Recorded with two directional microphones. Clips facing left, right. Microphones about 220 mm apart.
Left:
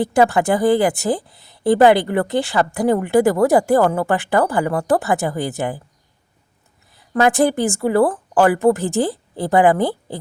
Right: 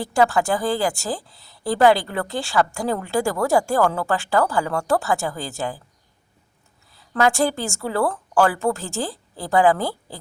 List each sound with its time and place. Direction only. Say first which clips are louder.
0.0 s speech: left 4 dB; 20° left (ahead or behind)
6.9 s speech: left 4 dB; 20° left (ahead or behind)